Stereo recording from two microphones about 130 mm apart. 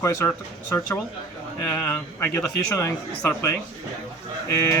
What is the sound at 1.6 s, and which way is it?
A man's voice, 15° left (ahead or behind).